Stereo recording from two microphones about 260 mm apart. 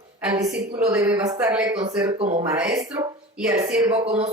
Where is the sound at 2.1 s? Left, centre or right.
Right.